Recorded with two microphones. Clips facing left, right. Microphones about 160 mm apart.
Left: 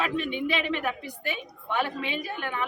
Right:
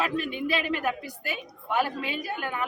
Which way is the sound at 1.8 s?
40° right (ahead or behind).